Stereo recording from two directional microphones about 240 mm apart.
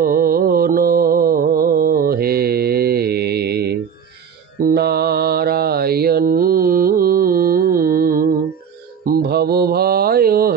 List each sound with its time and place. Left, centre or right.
0.1 s mantra: right